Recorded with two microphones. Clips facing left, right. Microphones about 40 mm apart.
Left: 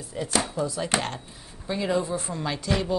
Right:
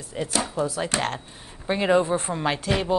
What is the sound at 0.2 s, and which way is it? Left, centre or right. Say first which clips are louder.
Speech: right 2 dB; right.